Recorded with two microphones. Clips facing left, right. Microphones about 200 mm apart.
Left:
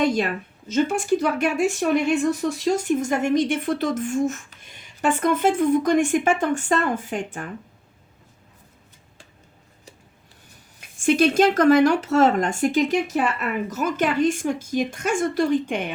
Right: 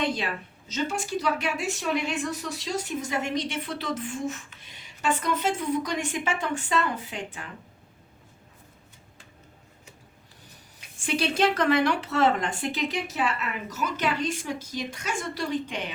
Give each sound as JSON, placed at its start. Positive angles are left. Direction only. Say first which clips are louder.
{"t": 0.0, "sound": "a woman's voice", "louder": "left 7 dB", "side_deg": 45}
{"t": 10.8, "sound": "a woman's voice", "louder": "left 10 dB", "side_deg": 45}